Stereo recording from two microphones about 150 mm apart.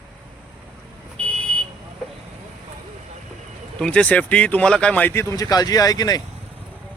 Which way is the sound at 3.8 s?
5° left (ahead or behind).